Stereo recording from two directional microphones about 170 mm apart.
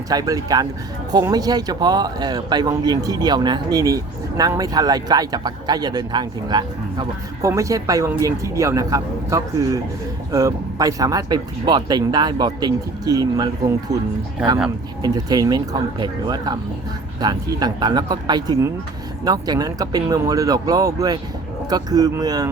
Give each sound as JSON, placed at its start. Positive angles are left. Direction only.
{"t": 0.1, "sound": "speech", "side_deg": -20}
{"t": 15.0, "sound": "speech", "side_deg": -20}